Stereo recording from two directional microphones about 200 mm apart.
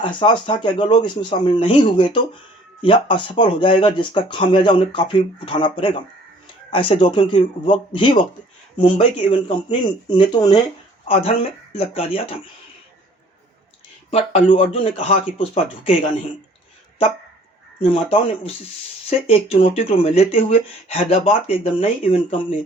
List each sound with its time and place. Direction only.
0.0 s speech: 25° left (ahead or behind)
14.1 s speech: 30° left (ahead or behind)
17.7 s speech: 25° left (ahead or behind)